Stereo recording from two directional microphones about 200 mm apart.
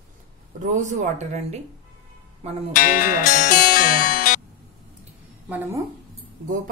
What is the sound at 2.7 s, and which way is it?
Speech, 45° left (ahead or behind).